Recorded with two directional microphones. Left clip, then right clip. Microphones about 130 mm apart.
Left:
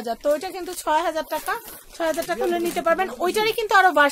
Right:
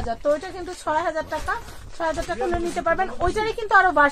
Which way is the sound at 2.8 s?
35° left (ahead or behind).